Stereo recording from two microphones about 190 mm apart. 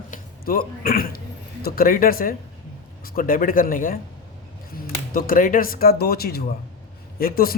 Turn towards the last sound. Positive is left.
turn(degrees=50)  # may be behind; listen again after turning